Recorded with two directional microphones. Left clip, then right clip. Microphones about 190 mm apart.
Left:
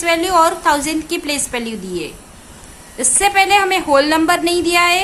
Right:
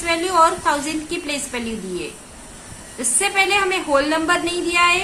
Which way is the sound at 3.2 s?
40° left (ahead or behind).